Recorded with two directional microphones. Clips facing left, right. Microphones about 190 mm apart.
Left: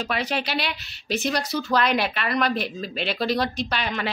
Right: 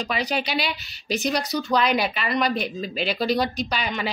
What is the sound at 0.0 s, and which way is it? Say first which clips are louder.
Speech: right 1 dB; centre (ahead or behind).